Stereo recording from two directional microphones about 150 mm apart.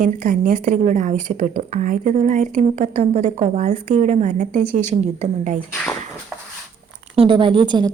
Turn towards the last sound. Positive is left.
turn(degrees=-30)  # may be behind; listen again after turning